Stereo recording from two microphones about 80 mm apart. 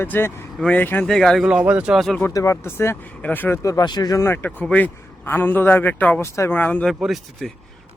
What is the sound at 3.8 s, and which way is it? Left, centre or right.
Speech, left.